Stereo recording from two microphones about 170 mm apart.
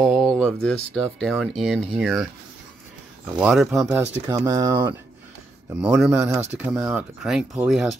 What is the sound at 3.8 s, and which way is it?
A man's voice, 15° right (ahead or behind).